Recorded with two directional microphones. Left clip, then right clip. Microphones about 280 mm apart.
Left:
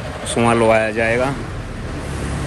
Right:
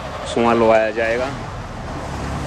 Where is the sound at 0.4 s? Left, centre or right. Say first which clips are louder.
Even; left.